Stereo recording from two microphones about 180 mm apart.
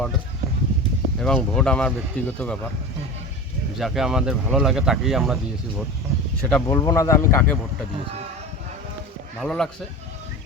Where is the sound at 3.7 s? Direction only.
Centre (ahead or behind).